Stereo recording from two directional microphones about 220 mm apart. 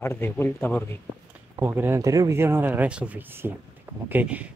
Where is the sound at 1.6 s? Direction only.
10° right (ahead or behind).